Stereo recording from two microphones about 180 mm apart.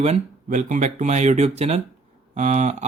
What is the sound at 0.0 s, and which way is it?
Speech, 40° right (ahead or behind).